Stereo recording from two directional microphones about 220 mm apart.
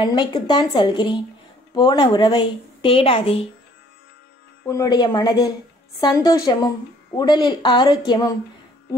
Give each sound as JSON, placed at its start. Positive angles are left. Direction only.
{"t": 0.0, "sound": "speech", "side_deg": 20}
{"t": 4.6, "sound": "speech", "side_deg": 15}